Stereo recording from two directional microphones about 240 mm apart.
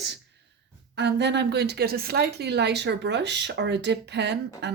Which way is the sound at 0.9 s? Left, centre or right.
Right.